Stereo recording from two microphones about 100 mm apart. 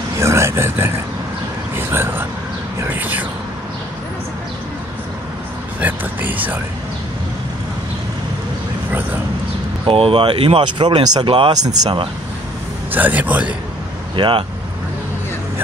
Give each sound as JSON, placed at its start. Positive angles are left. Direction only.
{"t": 0.2, "sound": "speech", "side_deg": -30}
{"t": 5.8, "sound": "speech", "side_deg": -15}
{"t": 9.8, "sound": "speech", "side_deg": -65}
{"t": 12.9, "sound": "speech", "side_deg": -20}
{"t": 14.1, "sound": "speech", "side_deg": -55}